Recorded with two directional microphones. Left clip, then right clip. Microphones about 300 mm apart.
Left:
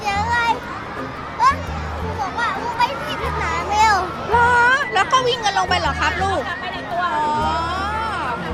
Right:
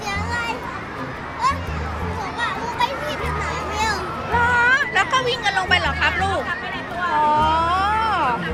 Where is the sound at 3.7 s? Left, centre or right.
Centre.